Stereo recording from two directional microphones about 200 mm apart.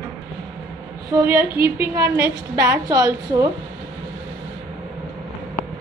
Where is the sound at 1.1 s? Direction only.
15° right (ahead or behind).